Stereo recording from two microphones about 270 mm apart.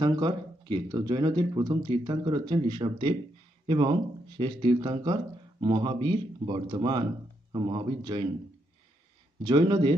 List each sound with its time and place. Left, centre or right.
0.0 s speech: centre
9.4 s speech: centre